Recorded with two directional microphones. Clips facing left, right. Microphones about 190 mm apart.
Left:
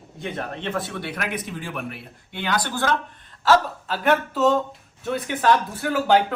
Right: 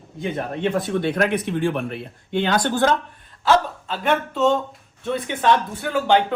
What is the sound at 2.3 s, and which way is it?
Speech, 25° right (ahead or behind).